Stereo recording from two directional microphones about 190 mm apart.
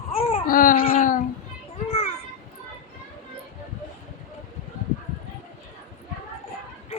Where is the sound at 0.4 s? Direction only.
45° left (ahead or behind).